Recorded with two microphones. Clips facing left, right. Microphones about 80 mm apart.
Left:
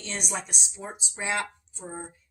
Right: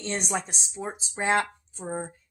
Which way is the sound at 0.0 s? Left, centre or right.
Right.